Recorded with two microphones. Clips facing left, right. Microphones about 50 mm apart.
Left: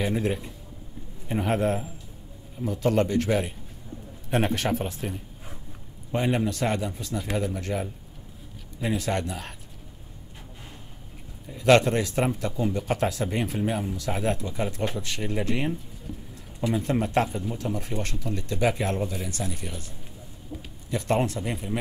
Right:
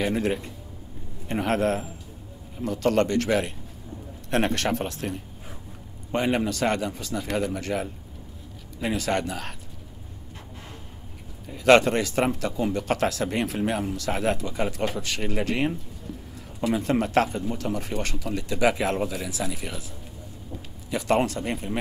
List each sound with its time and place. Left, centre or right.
0.0 s speech: centre
8.9 s speech: centre
11.6 s speech: centre
19.2 s speech: right
21.1 s speech: centre